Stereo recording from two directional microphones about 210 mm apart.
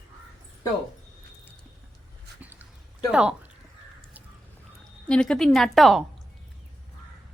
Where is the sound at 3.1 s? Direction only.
5° right (ahead or behind).